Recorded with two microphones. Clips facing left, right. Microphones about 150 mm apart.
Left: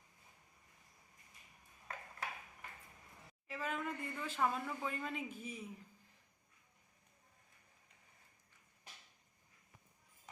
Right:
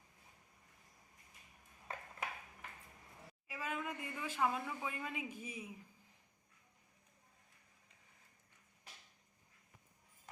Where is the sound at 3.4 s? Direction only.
10° right (ahead or behind).